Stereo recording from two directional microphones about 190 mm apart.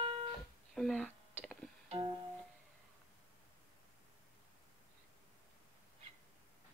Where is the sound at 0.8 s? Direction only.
5° left (ahead or behind).